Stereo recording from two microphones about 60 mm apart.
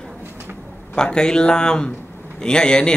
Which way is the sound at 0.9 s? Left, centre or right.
Centre.